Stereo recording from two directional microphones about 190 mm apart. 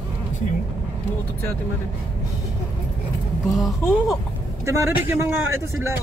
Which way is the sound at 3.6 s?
Centre (ahead or behind).